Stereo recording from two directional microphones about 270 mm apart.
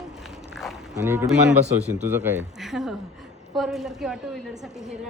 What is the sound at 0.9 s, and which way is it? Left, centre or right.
A woman's voice, centre.